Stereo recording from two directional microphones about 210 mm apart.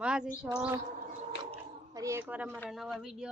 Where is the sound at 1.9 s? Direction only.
15° right (ahead or behind).